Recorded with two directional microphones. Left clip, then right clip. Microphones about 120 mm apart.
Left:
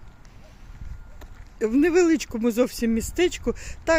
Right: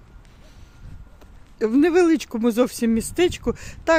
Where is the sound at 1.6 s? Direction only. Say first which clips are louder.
Right 2 dB; 25° right (ahead or behind).